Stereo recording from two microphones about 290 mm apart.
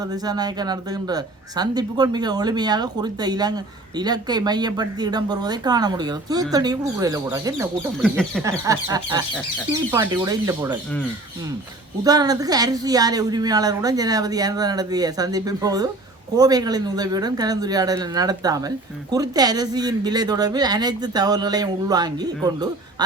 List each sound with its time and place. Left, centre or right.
0.1 s speech: centre
8.0 s speech: centre
8.4 s speech: centre
12.0 s speech: centre